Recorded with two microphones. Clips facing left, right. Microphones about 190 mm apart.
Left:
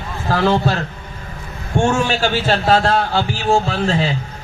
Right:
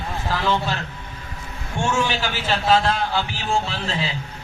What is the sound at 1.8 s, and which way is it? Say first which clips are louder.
A man's voice: left 6 dB; 55° left (ahead or behind).